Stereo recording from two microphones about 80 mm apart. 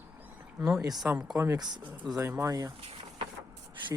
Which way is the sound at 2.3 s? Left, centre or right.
Right.